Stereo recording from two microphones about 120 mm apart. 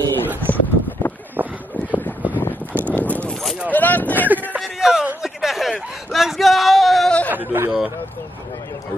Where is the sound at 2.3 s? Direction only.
15° left (ahead or behind).